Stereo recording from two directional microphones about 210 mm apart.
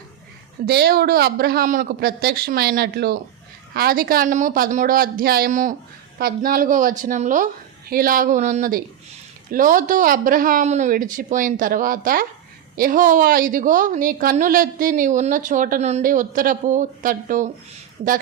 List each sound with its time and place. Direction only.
0.6 s a woman's voice: 50° right (ahead or behind)